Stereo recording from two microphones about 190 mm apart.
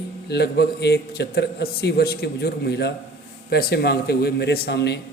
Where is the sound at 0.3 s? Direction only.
60° left (ahead or behind).